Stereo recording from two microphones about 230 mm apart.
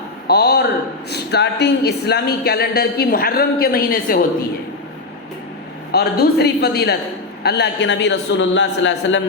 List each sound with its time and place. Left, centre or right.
0.3 s speech: left
5.9 s speech: left